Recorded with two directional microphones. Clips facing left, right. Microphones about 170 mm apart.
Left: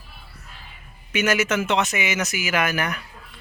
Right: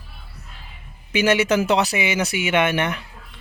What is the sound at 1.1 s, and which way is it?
Speech, 30° right (ahead or behind).